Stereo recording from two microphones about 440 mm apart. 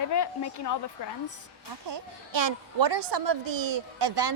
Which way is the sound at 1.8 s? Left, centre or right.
Right.